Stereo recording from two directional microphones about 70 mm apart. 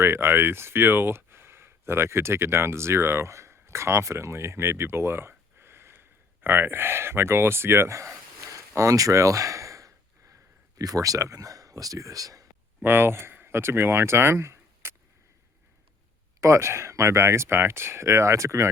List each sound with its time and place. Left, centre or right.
0.0 s speech: right
5.5 s a sound: right
10.8 s speech: right
12.8 s speech: right
16.4 s speech: right